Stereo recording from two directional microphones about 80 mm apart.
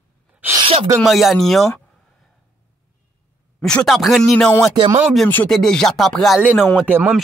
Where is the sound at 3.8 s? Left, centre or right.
Centre.